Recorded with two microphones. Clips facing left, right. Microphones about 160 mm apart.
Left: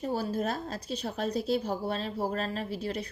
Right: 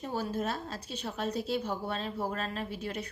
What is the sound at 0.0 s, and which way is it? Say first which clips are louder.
A woman's voice: left 3 dB; 40° left (ahead or behind).